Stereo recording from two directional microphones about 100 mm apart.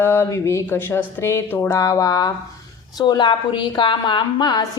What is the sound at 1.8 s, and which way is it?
A woman's voice, 35° left (ahead or behind).